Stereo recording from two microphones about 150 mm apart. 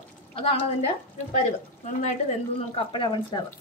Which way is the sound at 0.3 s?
40° left (ahead or behind).